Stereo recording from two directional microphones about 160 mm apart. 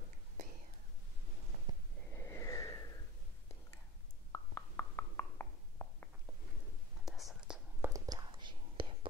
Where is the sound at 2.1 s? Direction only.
15° left (ahead or behind).